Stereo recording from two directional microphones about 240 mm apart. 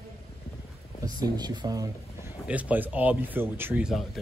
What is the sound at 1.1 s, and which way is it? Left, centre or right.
Speech, centre.